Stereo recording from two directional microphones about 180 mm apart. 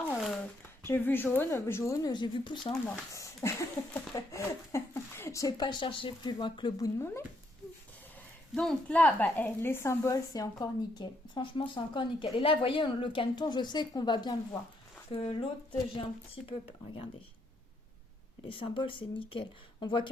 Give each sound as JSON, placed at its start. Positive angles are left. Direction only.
{"t": 0.1, "sound": "a sound", "side_deg": 0}
{"t": 0.9, "sound": "a woman's voice", "side_deg": 10}
{"t": 3.1, "sound": "a sound", "side_deg": 15}
{"t": 3.9, "sound": "a woman's voice", "side_deg": 15}
{"t": 8.5, "sound": "a woman's voice", "side_deg": 5}
{"t": 18.4, "sound": "a woman's voice", "side_deg": 30}